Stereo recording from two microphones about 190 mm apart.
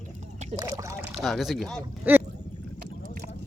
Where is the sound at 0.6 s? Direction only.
15° right (ahead or behind).